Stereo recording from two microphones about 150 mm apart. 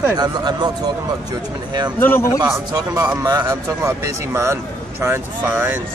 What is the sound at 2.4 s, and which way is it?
Speech, 20° right (ahead or behind).